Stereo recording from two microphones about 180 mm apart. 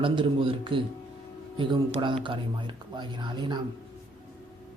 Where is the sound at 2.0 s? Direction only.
25° right (ahead or behind).